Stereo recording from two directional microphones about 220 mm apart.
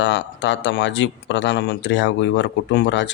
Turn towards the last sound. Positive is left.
turn(degrees=55)  # may be behind; listen again after turning